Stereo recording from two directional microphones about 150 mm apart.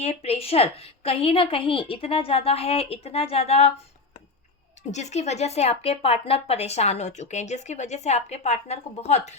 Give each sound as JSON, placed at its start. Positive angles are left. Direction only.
{"t": 0.0, "sound": "a woman's voice", "side_deg": 45}
{"t": 4.9, "sound": "speech", "side_deg": 50}